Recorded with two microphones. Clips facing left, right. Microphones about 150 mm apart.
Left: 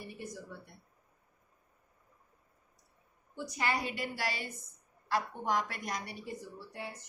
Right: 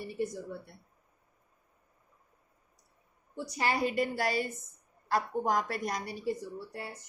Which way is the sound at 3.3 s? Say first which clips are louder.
Right 3 dB; 35° right (ahead or behind).